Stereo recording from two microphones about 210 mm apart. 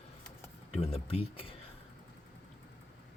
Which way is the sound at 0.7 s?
30° left (ahead or behind).